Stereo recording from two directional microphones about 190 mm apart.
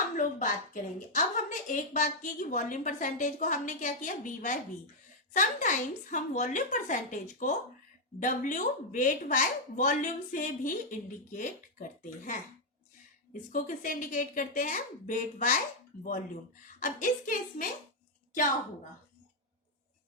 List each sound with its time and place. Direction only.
0.2 s a woman's voice: 40° left (ahead or behind)
13.5 s a woman's voice: 45° left (ahead or behind)